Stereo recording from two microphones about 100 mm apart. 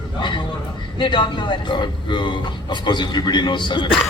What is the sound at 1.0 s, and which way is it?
Speech, 50° left (ahead or behind).